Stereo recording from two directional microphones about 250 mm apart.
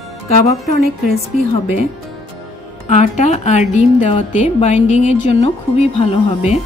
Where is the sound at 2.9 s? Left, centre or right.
Left.